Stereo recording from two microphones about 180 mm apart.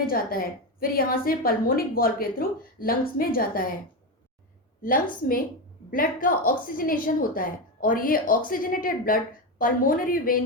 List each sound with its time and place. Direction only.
0.0 s a woman's voice: 55° left (ahead or behind)
5.9 s a woman's voice: 50° left (ahead or behind)